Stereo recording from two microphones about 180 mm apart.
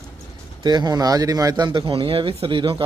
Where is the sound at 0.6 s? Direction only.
25° right (ahead or behind).